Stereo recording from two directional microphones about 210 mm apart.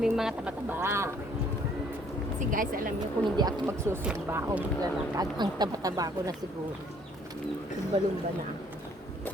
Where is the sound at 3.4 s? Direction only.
15° right (ahead or behind).